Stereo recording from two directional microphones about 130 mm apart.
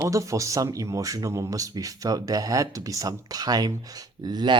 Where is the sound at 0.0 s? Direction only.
25° right (ahead or behind).